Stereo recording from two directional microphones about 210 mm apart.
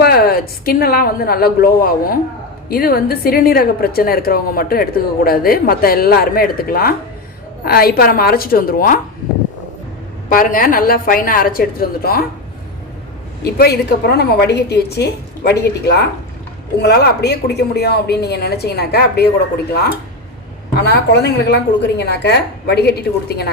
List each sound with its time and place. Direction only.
0.0 s a woman's voice: 45° left (ahead or behind)
10.2 s a woman's voice: 40° left (ahead or behind)
13.4 s a woman's voice: 50° left (ahead or behind)
20.7 s a woman's voice: 50° left (ahead or behind)